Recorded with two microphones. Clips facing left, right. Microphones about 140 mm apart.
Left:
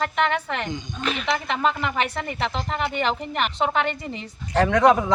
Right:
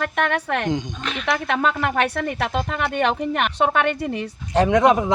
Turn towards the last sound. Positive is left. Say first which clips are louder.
# right 1 dB
turn(degrees=-20)  # may be behind; listen again after turning